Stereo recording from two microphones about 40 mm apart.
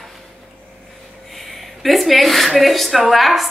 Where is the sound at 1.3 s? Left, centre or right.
Centre.